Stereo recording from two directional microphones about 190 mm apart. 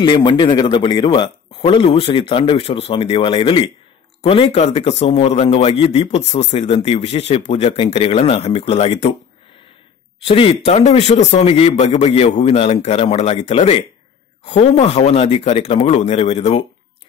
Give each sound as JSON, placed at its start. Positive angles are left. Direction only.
{"t": 0.0, "sound": "a man's voice", "side_deg": 25}
{"t": 10.2, "sound": "a man's voice", "side_deg": 30}